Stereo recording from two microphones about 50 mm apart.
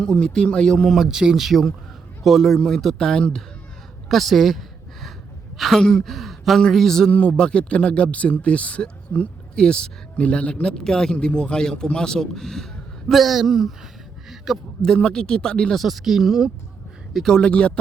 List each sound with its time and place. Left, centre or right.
0.0 s a man's voice: centre
0.9 s a man's voice: centre
4.1 s a sound: centre
5.5 s speech: centre
5.8 s a man's voice: centre
6.1 s a man's voice: centre
7.1 s speech: left
9.6 s a man's voice: centre
13.1 s speech: centre
14.3 s a sound: centre
14.9 s a man's voice: centre
15.7 s speech: centre
17.2 s a man's voice: centre